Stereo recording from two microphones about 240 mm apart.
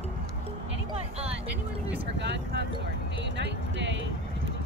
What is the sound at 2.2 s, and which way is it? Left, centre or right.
Speech, right.